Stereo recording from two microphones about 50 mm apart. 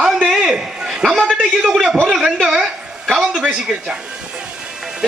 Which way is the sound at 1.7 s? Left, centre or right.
Centre.